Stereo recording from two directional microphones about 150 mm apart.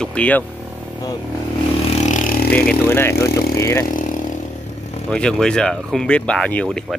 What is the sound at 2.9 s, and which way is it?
Speech, 15° left (ahead or behind).